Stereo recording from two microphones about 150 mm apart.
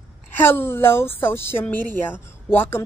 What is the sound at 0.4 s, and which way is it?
A woman's voice, 15° left (ahead or behind).